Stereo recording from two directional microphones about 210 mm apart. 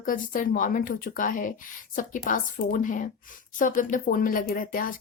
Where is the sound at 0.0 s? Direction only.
40° left (ahead or behind).